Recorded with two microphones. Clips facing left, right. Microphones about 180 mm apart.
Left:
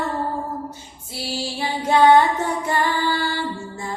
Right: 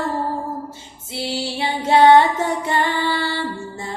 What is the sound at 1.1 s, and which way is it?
Female singing, 25° right (ahead or behind).